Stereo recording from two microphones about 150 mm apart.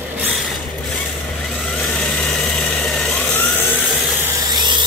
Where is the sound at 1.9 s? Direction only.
5° left (ahead or behind).